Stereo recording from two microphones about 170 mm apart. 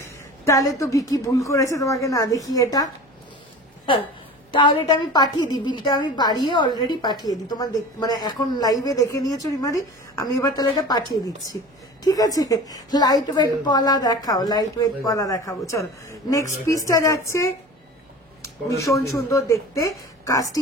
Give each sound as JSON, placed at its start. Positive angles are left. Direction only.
{"t": 0.0, "sound": "a sound", "side_deg": 15}
{"t": 0.7, "sound": "a woman's voice", "side_deg": 20}
{"t": 4.5, "sound": "a woman's voice", "side_deg": 30}